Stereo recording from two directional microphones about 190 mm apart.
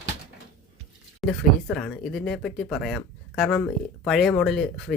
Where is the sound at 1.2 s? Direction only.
Centre (ahead or behind).